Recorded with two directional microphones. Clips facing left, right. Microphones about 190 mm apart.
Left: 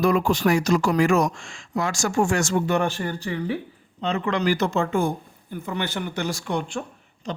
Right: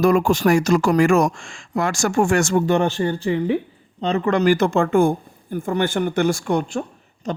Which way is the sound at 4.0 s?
40° right (ahead or behind).